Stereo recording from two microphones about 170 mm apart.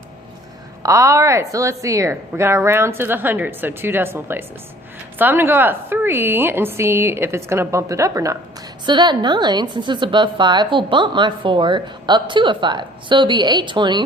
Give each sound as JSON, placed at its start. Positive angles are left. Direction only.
{"t": 0.8, "sound": "a woman's voice", "side_deg": -20}